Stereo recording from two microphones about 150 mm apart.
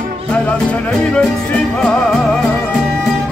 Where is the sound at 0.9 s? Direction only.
5° left (ahead or behind).